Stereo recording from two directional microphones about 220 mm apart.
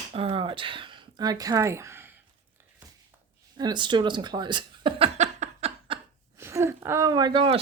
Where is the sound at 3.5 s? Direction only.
20° right (ahead or behind).